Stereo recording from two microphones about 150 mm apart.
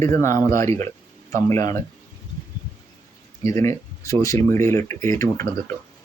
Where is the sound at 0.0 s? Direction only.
20° left (ahead or behind).